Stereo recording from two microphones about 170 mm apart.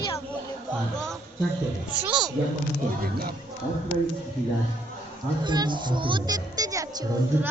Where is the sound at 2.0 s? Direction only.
5° right (ahead or behind).